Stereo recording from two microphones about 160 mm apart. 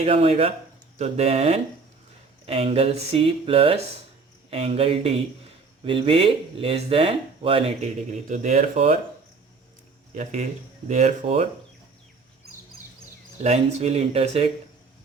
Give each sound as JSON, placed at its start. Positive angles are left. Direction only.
{"t": 0.0, "sound": "speech", "side_deg": -40}
{"t": 8.3, "sound": "speech", "side_deg": -45}
{"t": 10.8, "sound": "speech", "side_deg": -45}
{"t": 13.4, "sound": "speech", "side_deg": -40}